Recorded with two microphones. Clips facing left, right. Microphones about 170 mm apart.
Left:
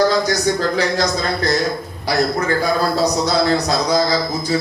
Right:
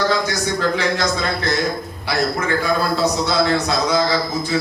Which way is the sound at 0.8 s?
40° left (ahead or behind).